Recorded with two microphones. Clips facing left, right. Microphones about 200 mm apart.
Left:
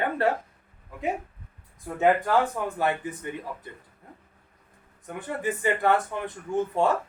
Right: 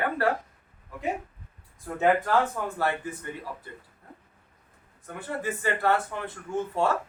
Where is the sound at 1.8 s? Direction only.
15° left (ahead or behind).